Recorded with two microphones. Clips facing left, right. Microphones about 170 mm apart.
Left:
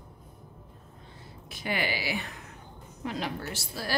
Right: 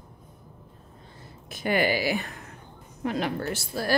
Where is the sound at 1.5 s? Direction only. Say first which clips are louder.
Right 7 dB; 50° right (ahead or behind).